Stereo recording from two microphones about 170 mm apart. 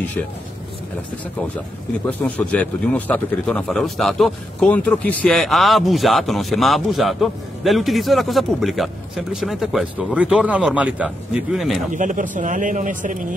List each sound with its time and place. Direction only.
2.0 s a man's voice: 10° left (ahead or behind)
11.9 s speech: 50° right (ahead or behind)